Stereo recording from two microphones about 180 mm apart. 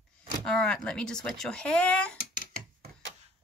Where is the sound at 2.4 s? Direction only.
60° right (ahead or behind).